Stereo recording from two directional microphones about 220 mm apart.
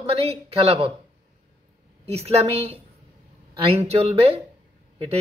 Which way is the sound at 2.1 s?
30° right (ahead or behind).